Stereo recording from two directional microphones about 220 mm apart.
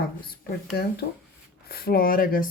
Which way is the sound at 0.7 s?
45° left (ahead or behind).